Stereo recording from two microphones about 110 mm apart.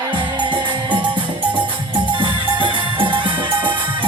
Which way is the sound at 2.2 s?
50° right (ahead or behind).